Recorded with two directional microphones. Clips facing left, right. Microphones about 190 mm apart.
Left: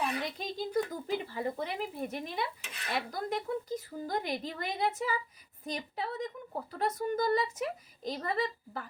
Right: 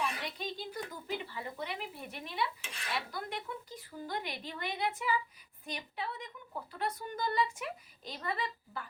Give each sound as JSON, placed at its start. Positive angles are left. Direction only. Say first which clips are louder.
{"t": 0.0, "sound": "speech", "louder": "left 3 dB", "side_deg": 40}
{"t": 2.6, "sound": "dishes", "louder": "even", "side_deg": 0}
{"t": 2.9, "sound": "a woman's voice", "louder": "left 5 dB", "side_deg": 40}